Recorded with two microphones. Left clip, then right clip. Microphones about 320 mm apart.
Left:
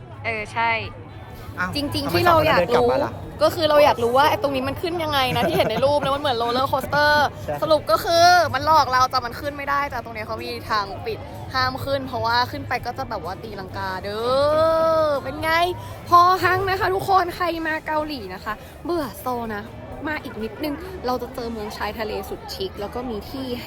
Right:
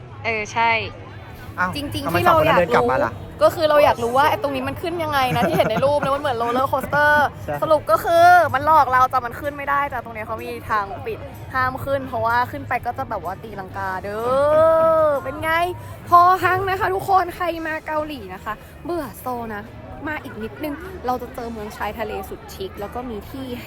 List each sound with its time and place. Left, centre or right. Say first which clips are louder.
0.3 s a woman's voice: right 3 dB; centre
1.7 s speech: even; centre
2.7 s speech: right 1 dB; right
3.3 s speech: right 1 dB; centre